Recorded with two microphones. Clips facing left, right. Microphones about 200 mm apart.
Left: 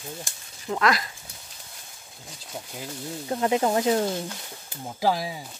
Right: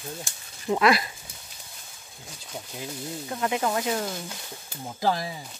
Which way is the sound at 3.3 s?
30° left (ahead or behind).